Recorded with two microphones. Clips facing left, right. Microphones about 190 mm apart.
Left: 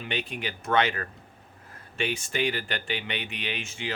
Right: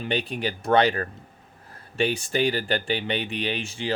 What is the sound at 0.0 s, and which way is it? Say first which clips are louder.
Speech: right 6 dB; 35° right (ahead or behind).